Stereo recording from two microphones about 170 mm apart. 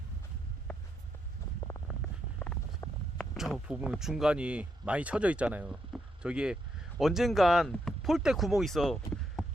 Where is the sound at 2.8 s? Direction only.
15° left (ahead or behind).